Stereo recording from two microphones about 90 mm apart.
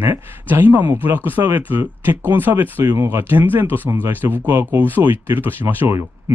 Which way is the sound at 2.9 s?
30° right (ahead or behind).